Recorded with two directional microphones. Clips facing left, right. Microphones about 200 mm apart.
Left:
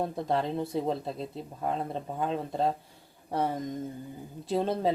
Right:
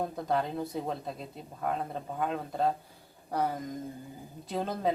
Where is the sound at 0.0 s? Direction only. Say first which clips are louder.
Left 2 dB; 30° left (ahead or behind).